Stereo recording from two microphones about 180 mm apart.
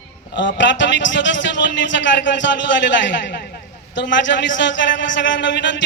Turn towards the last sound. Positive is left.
turn(degrees=85)